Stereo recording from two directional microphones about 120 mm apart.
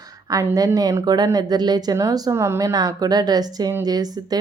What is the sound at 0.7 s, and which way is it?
A woman's voice, 30° right (ahead or behind).